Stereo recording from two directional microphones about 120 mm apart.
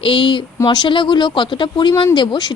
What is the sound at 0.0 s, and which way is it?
A woman's voice, 45° left (ahead or behind).